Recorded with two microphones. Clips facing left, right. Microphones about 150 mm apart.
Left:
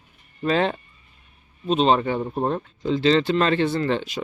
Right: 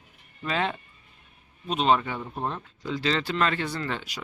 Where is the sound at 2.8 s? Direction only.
25° left (ahead or behind).